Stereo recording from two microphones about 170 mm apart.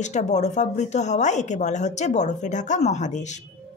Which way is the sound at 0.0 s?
45° left (ahead or behind).